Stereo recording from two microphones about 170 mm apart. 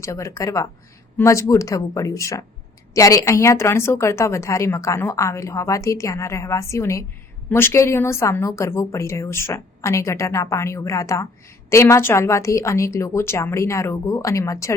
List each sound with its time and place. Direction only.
0.0 s a woman's voice: 15° left (ahead or behind)